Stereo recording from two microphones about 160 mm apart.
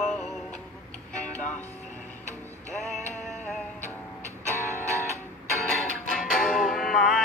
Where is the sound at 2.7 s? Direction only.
Centre (ahead or behind).